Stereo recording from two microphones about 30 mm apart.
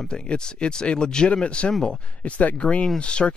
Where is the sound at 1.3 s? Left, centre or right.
Left.